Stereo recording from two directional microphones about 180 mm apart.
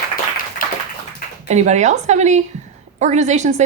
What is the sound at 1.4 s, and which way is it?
Speech, 40° right (ahead or behind).